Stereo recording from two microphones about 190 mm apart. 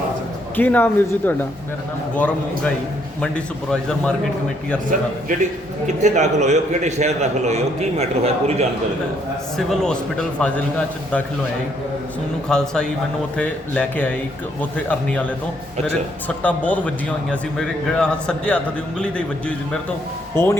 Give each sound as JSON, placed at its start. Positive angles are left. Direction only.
{"t": 0.5, "sound": "a man's voice", "side_deg": 10}
{"t": 5.8, "sound": "a man's voice", "side_deg": -40}
{"t": 9.6, "sound": "a man's voice", "side_deg": 5}
{"t": 12.5, "sound": "a man's voice", "side_deg": 5}
{"t": 16.4, "sound": "a man's voice", "side_deg": 10}